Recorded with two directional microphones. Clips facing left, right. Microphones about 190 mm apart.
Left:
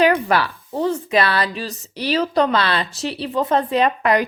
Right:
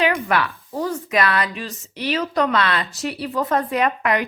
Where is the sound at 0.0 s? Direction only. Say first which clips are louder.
Left 4 dB; 35° left (ahead or behind).